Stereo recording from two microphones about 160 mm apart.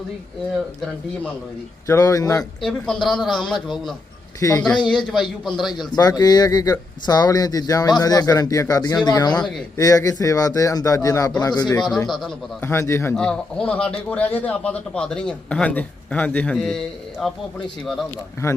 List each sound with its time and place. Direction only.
1.9 s speech: 20° left (ahead or behind)
2.6 s speech: 5° left (ahead or behind)
4.4 s speech: 20° left (ahead or behind)
5.0 s speech: centre (ahead or behind)
5.7 s speech: 25° left (ahead or behind)
12.6 s a man's voice: 15° left (ahead or behind)
13.1 s a man's voice: 5° left (ahead or behind)
18.4 s speech: 20° left (ahead or behind)